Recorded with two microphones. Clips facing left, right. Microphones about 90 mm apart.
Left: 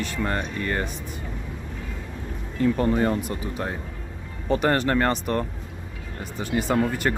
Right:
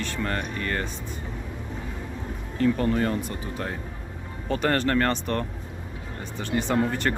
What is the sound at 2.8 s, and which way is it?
Speech, 20° left (ahead or behind).